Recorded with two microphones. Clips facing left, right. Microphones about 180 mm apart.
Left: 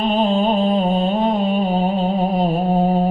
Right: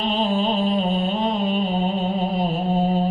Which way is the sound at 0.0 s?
50° left (ahead or behind).